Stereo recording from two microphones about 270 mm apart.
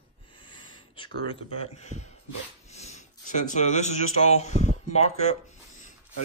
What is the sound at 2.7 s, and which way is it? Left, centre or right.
Speech, left.